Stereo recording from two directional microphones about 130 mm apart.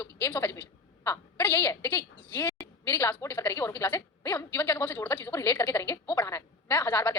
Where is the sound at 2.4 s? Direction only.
30° left (ahead or behind).